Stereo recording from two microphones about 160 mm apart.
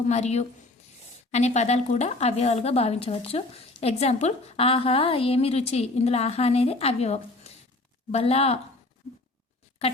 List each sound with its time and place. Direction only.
0.1 s a woman's voice: 45° left (ahead or behind)